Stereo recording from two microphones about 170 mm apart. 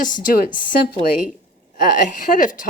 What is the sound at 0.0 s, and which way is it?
Speech, 55° left (ahead or behind).